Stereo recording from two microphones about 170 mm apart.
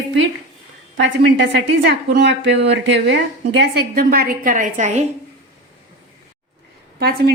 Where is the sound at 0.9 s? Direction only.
90° right.